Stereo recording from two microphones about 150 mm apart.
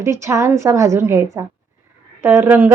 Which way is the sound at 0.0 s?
20° right (ahead or behind).